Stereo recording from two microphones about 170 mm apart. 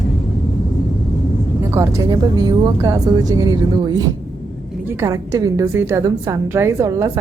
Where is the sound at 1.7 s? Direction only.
20° right (ahead or behind).